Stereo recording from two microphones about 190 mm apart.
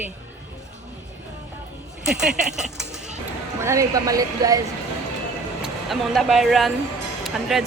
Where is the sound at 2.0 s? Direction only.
5° right (ahead or behind).